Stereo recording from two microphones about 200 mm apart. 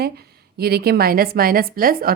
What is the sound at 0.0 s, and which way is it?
A woman's voice, 50° right (ahead or behind).